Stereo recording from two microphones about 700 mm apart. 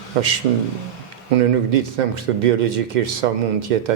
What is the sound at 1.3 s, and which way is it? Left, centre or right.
Speech, right.